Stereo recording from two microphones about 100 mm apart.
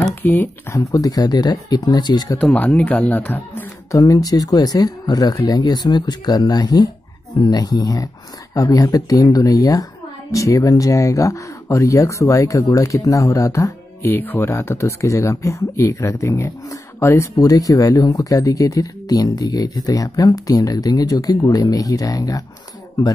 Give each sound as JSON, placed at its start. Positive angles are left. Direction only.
{"t": 0.1, "sound": "speech", "side_deg": 20}
{"t": 0.7, "sound": "speech", "side_deg": 40}
{"t": 2.3, "sound": "speech", "side_deg": 15}
{"t": 3.9, "sound": "speech", "side_deg": 35}